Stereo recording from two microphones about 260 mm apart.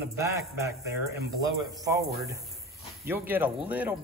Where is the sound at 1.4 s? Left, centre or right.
Centre.